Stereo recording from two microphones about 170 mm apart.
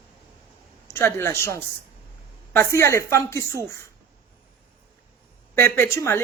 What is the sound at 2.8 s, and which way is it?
Speech, 15° left (ahead or behind).